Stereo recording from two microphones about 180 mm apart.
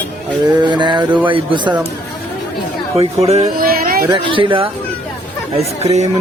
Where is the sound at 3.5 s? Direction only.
55° right (ahead or behind).